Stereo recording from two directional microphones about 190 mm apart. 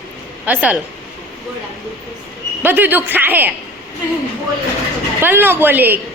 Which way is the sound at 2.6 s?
10° right (ahead or behind).